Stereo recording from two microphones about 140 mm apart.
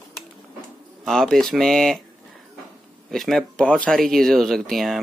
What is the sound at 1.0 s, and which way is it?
Speech, centre (ahead or behind).